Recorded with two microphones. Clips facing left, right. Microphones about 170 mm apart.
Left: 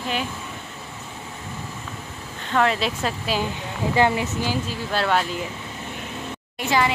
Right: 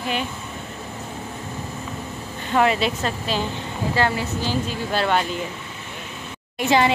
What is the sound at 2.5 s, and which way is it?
Speech, 5° right (ahead or behind).